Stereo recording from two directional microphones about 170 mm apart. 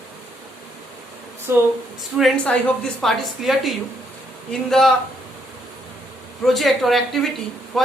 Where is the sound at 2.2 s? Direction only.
5° left (ahead or behind).